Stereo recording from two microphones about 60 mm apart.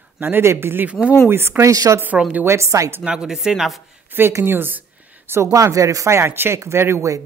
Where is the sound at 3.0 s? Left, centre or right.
Centre.